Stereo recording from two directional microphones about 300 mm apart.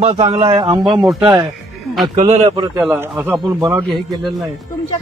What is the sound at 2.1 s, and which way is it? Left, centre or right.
Speech, right.